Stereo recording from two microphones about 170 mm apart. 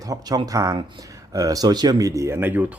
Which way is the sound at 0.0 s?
20° right (ahead or behind).